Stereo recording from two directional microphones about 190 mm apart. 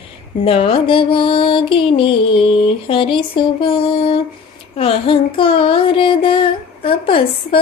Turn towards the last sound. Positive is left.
turn(degrees=30)  # may be behind; listen again after turning